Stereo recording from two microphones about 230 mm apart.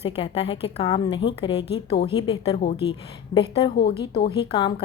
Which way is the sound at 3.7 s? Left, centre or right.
Left.